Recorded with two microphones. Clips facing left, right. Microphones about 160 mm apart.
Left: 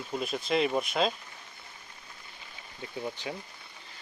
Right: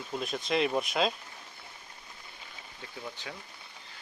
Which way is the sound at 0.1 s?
Centre (ahead or behind).